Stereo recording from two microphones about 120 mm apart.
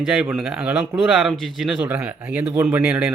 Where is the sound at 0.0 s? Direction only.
5° right (ahead or behind).